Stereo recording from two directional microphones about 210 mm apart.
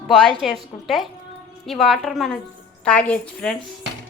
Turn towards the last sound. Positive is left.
turn(degrees=5)  # may be behind; listen again after turning